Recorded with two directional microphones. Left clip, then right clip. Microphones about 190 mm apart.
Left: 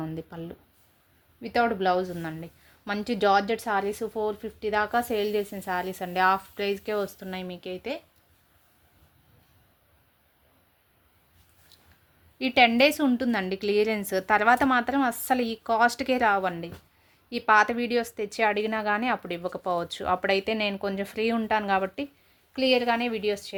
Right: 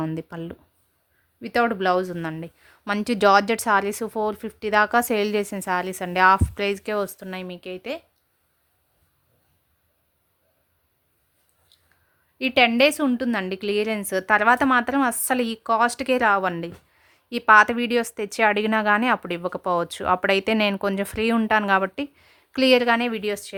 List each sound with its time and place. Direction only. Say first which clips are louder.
0.0 s a woman's voice: right 6 dB; 30° right (ahead or behind)
12.4 s a woman's voice: right 2 dB; 20° right (ahead or behind)